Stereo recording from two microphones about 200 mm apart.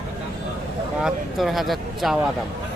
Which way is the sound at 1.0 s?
Centre (ahead or behind).